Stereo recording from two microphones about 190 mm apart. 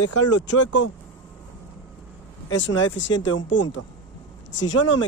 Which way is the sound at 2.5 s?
80° left.